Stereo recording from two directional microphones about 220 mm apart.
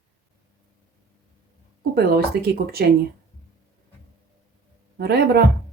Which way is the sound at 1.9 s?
45° right (ahead or behind).